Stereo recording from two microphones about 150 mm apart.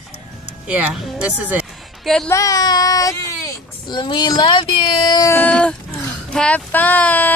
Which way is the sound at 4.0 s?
30° left (ahead or behind).